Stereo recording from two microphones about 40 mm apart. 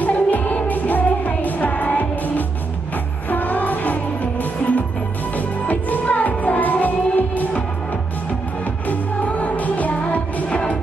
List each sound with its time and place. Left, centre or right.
0.0 s music: left
8.8 s music: left